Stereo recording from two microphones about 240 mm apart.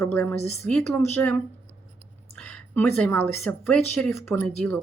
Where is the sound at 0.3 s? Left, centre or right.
Left.